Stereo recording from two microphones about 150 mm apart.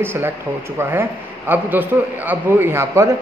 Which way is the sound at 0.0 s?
15° right (ahead or behind).